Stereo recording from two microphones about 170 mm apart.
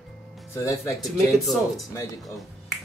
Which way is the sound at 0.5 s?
15° left (ahead or behind).